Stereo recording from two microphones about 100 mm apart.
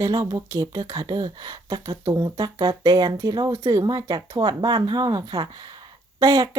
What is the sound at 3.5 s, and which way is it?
Speech, 30° right (ahead or behind).